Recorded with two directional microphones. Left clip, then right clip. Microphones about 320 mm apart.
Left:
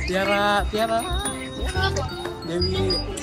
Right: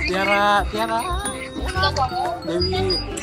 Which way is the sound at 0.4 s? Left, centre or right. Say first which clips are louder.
Right 3 dB; centre.